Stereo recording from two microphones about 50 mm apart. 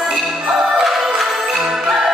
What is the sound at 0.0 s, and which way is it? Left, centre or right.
Music, centre.